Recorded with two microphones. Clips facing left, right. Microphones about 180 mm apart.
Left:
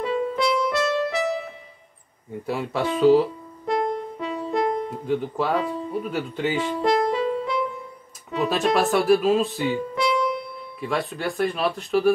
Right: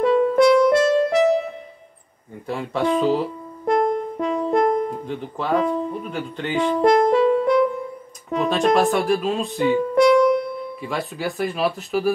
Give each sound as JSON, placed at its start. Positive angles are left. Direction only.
{"t": 0.0, "sound": "music", "side_deg": -55}
{"t": 2.4, "sound": "speech", "side_deg": 5}
{"t": 3.6, "sound": "music", "side_deg": -50}
{"t": 5.0, "sound": "speech", "side_deg": 0}
{"t": 6.6, "sound": "music", "side_deg": -50}
{"t": 8.5, "sound": "speech", "side_deg": 0}
{"t": 9.9, "sound": "music", "side_deg": -50}
{"t": 10.8, "sound": "speech", "side_deg": 0}